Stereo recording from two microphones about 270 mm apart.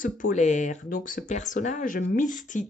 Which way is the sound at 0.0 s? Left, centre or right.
Left.